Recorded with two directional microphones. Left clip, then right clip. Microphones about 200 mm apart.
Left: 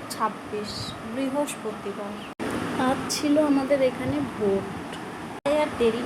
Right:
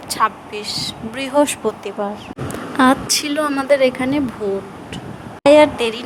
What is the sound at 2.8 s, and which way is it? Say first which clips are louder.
Speech: right 11 dB; 50° right (ahead or behind).